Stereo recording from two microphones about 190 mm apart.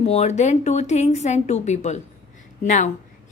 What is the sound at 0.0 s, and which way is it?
Speech, 35° left (ahead or behind).